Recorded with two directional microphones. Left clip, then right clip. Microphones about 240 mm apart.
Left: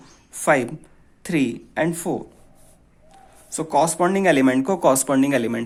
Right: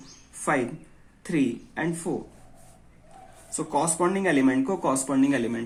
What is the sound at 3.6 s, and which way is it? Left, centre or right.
Speech, left.